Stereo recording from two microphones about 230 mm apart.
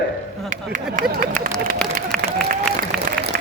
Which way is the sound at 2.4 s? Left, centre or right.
Right.